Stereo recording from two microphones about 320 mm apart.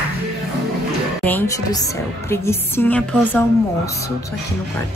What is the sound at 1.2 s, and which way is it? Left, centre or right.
A woman's voice, centre.